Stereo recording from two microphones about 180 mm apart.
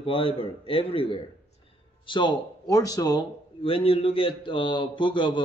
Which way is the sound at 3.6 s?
30° left (ahead or behind).